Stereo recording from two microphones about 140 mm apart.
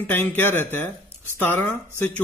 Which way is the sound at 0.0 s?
15° left (ahead or behind).